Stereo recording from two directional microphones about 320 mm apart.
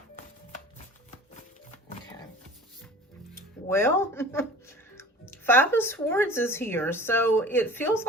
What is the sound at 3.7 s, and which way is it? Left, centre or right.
Speech, centre.